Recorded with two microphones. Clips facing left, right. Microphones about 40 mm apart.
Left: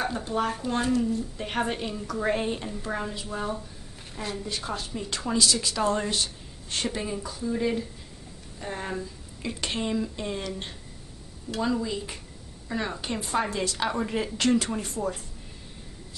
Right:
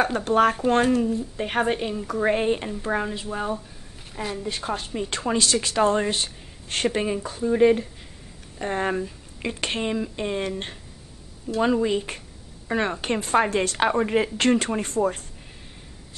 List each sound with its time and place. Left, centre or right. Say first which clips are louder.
0.0 s speech: right 8 dB; right
1.4 s a woman's voice: right 8 dB; right
4.5 s speech: right 4 dB; right
9.8 s a woman's voice: right 3 dB; right